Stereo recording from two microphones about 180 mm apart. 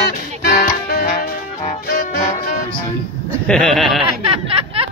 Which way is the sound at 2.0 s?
40° left (ahead or behind).